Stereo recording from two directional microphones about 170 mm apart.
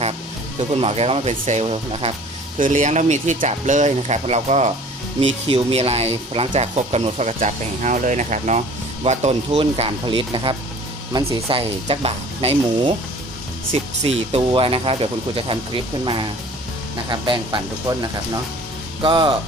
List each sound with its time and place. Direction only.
0.7 s speech: 40° right (ahead or behind)
2.6 s speech: 50° right (ahead or behind); by 10.5 s 30° right (ahead or behind)
11.1 s speech: 15° right (ahead or behind)
11.4 s speech: 35° right (ahead or behind)
14.0 s speech: 35° right (ahead or behind)
19.0 s speech: 30° right (ahead or behind)